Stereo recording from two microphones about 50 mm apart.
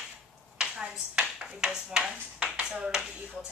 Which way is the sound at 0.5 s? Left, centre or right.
Centre.